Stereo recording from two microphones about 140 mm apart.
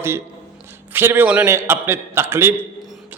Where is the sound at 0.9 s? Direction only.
15° right (ahead or behind).